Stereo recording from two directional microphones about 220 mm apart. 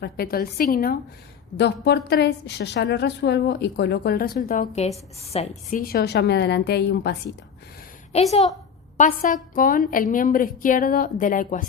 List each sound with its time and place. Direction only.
0.0 s a woman's voice: 45° left (ahead or behind); by 5.8 s 30° left (ahead or behind)
5.8 s a woman's voice: 45° left (ahead or behind)
8.1 s a woman's voice: 30° left (ahead or behind)